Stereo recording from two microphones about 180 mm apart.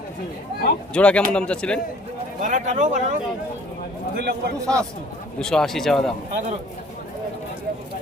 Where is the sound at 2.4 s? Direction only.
45° right (ahead or behind).